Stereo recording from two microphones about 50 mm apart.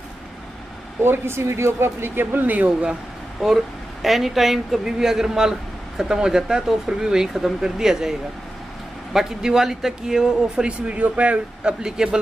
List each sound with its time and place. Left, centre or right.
1.0 s speech: right
3.4 s a woman's voice: centre
10.9 s speech: right
11.8 s a woman's voice: centre